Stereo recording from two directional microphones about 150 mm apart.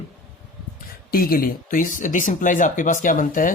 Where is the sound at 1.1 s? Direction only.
80° left.